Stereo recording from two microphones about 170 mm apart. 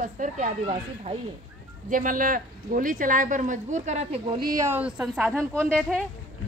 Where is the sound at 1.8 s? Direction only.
50° right (ahead or behind).